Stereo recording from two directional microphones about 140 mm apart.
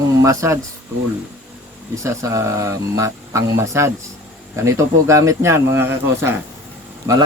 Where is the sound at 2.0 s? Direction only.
20° right (ahead or behind).